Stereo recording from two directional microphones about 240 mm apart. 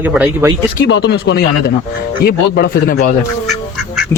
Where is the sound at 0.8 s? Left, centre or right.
Left.